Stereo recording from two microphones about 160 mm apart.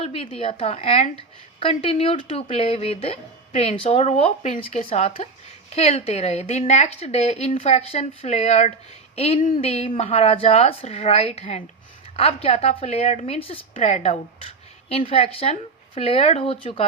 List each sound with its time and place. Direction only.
0.0 s a woman's voice: 35° left (ahead or behind); by 4.9 s 50° left (ahead or behind)
4.9 s a woman's voice: 35° left (ahead or behind)